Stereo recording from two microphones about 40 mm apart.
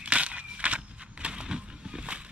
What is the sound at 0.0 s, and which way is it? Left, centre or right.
Walk, right.